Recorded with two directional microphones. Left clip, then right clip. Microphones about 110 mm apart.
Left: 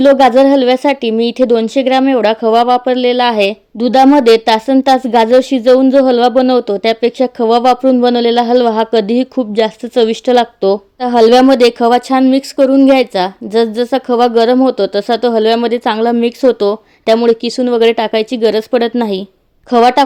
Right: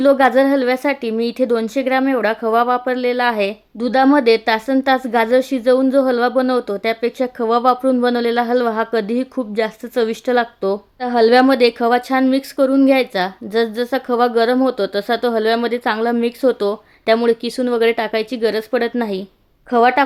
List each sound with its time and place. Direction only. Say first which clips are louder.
0.0 s speech: left 6 dB; 30° left (ahead or behind)